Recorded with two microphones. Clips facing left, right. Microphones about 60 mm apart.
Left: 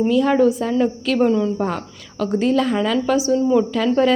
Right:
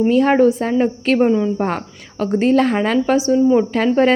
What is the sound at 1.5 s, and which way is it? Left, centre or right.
Speech, right.